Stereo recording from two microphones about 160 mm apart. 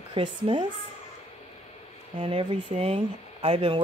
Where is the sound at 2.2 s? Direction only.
35° right (ahead or behind).